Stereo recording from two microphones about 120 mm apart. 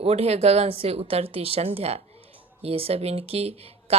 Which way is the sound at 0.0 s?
60° right (ahead or behind).